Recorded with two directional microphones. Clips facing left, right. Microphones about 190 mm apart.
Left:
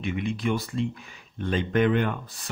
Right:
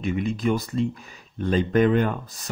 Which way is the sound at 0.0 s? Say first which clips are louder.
Right 3 dB; 40° right (ahead or behind).